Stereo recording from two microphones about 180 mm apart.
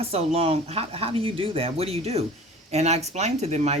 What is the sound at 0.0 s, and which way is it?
A woman's voice, 35° right (ahead or behind).